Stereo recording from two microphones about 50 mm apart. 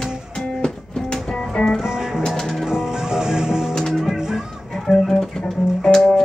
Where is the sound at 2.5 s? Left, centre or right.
Centre.